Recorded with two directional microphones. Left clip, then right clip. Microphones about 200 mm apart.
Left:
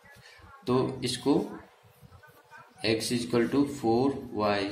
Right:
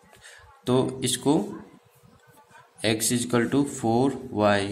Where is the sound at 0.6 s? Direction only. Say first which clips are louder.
Right 4 dB; 45° right (ahead or behind).